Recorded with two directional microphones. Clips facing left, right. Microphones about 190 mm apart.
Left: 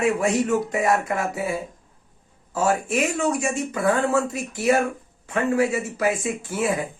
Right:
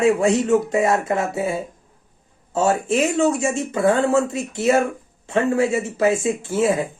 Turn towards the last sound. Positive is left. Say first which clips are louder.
# right 5 dB
turn(degrees=-25)  # may be behind; listen again after turning